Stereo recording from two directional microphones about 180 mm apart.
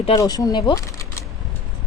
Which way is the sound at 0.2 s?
20° left (ahead or behind).